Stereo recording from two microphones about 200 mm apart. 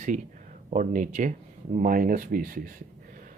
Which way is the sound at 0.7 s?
40° right (ahead or behind).